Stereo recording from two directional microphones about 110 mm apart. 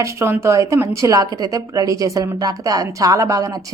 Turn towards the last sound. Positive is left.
turn(degrees=-30)  # may be behind; listen again after turning